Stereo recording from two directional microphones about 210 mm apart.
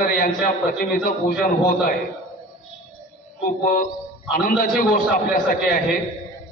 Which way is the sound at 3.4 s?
40° left (ahead or behind).